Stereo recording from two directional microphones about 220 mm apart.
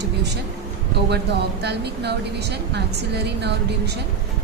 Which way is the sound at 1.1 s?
50° right (ahead or behind).